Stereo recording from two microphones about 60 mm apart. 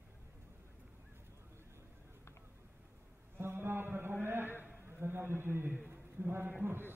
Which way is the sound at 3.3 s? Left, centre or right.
Right.